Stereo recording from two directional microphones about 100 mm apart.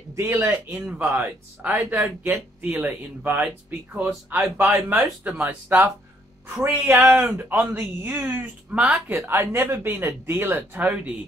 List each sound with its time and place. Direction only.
0.1 s speech: 25° right (ahead or behind)